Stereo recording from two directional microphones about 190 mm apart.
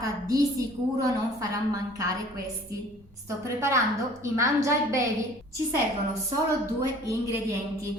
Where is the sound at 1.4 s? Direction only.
15° right (ahead or behind).